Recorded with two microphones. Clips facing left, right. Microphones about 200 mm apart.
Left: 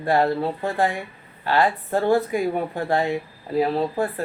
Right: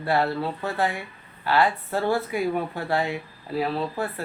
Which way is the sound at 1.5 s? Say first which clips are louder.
Left 2 dB; 45° left (ahead or behind).